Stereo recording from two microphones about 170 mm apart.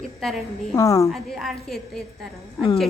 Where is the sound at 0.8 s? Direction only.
20° left (ahead or behind).